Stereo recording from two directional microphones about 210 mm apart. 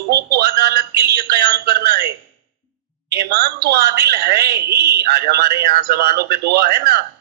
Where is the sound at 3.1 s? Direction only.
50° right (ahead or behind).